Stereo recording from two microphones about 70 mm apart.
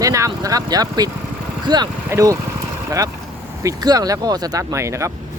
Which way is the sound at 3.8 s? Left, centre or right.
Right.